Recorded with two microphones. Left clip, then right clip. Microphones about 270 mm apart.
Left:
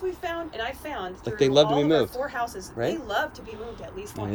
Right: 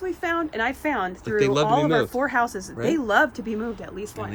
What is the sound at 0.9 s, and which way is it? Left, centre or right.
Speech, left.